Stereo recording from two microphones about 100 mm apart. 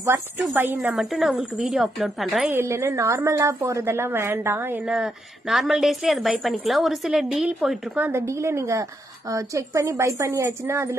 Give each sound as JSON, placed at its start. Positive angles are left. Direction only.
{"t": 0.6, "sound": "a woman's voice", "side_deg": -20}
{"t": 0.9, "sound": "a woman's voice", "side_deg": 0}
{"t": 2.5, "sound": "a woman's voice", "side_deg": -25}
{"t": 4.8, "sound": "a woman's voice", "side_deg": -5}
{"t": 7.4, "sound": "a woman's voice", "side_deg": -10}
{"t": 8.1, "sound": "a woman's voice", "side_deg": -25}